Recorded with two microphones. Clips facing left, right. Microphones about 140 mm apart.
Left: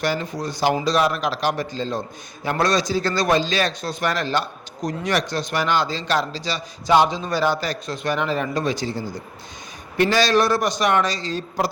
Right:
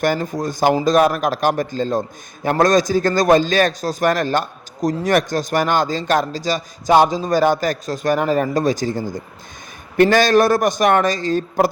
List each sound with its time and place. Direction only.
0.0 s a man's voice: 45° right (ahead or behind)